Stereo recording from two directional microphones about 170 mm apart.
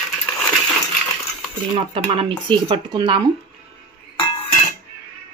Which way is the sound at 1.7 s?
30° right (ahead or behind).